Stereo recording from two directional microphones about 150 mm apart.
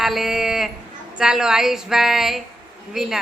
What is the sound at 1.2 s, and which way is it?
Speech, 5° right (ahead or behind).